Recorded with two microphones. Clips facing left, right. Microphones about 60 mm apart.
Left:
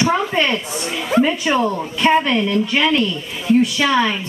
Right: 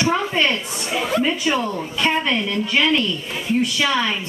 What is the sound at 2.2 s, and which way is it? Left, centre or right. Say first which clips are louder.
A woman's voice: left 4 dB; centre.